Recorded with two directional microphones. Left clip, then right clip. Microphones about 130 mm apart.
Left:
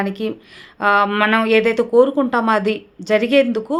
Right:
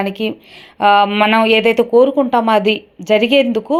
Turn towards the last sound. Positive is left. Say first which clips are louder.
# right 3 dB
turn(degrees=-15)  # may be behind; listen again after turning